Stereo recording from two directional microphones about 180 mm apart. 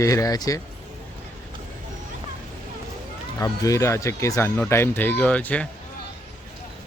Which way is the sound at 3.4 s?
20° left (ahead or behind).